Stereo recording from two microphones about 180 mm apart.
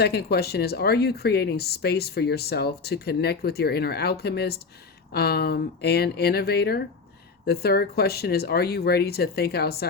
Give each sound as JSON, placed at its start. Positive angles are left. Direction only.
{"t": 0.0, "sound": "speech", "side_deg": 65}